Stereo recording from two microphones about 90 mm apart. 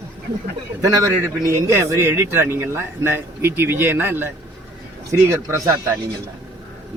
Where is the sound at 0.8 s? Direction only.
35° right (ahead or behind).